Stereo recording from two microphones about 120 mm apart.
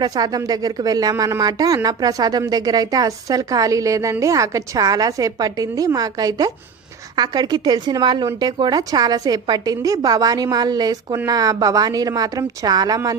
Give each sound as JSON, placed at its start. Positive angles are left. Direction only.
{"t": 0.0, "sound": "a woman's voice", "side_deg": -35}